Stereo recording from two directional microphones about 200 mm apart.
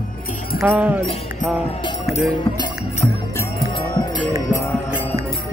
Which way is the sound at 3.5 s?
25° left (ahead or behind).